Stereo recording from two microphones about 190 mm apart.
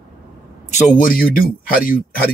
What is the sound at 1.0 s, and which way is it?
Speech, 50° left (ahead or behind).